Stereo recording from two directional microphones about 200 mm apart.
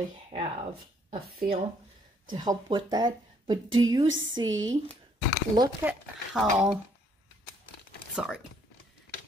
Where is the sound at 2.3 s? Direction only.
20° right (ahead or behind).